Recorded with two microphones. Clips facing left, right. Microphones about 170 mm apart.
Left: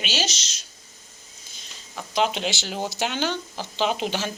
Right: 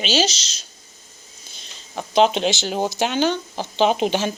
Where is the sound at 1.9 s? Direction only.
25° right (ahead or behind).